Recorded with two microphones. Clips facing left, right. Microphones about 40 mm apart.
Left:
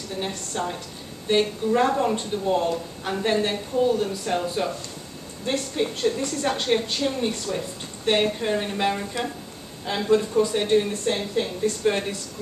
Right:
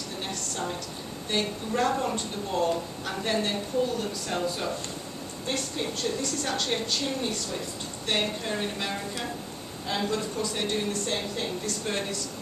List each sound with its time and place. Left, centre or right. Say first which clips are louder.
0.2 s speech: left 5 dB; centre